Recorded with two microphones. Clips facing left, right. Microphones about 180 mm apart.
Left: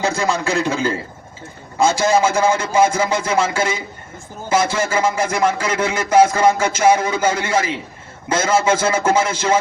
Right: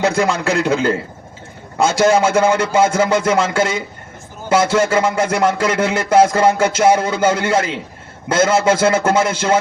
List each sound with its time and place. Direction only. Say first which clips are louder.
0.0 s a man's voice: right 3 dB; 65° right (ahead or behind)